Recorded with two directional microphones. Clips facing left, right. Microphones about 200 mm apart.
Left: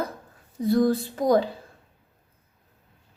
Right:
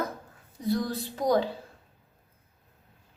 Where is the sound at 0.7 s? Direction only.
50° left (ahead or behind).